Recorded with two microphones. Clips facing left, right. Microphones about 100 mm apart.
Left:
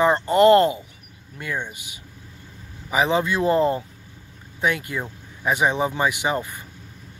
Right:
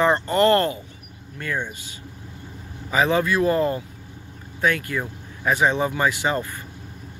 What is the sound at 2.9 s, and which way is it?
Speech, 20° left (ahead or behind).